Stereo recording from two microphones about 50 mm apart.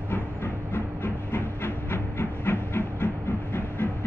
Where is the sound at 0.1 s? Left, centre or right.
Left.